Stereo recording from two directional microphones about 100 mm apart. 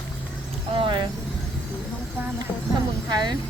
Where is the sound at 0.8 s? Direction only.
55° right (ahead or behind).